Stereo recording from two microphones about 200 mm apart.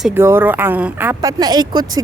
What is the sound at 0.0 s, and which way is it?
A woman's voice, 10° right (ahead or behind).